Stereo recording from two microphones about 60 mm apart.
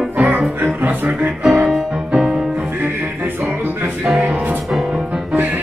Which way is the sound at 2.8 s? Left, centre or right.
Right.